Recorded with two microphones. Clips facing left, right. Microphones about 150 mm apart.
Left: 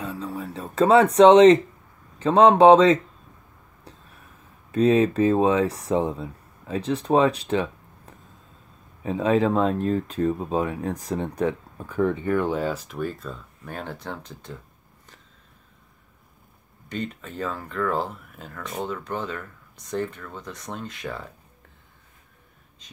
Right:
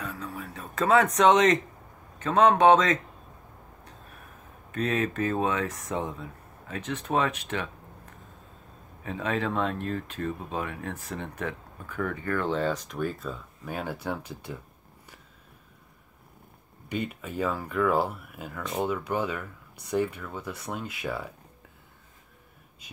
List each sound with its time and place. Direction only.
0.0 s speech: 30° left (ahead or behind)
4.7 s speech: 35° left (ahead or behind)
12.1 s speech: 20° left (ahead or behind); by 14.6 s 10° right (ahead or behind)
16.9 s speech: 10° right (ahead or behind)